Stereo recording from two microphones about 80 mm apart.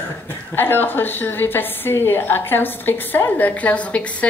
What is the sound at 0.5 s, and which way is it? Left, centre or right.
A woman's voice, left.